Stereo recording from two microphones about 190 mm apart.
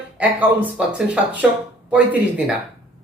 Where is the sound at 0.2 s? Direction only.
10° right (ahead or behind).